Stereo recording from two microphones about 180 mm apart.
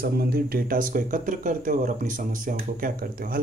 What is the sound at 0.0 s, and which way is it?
Speech, 60° right (ahead or behind).